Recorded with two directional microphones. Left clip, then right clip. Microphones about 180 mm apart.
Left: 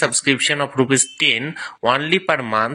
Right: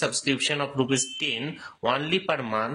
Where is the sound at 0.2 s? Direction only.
25° left (ahead or behind).